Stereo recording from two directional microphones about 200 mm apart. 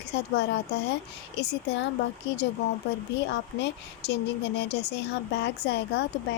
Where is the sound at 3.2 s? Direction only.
60° left (ahead or behind).